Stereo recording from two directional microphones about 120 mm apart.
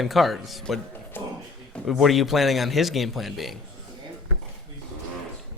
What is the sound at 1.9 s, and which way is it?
A man's voice, centre (ahead or behind).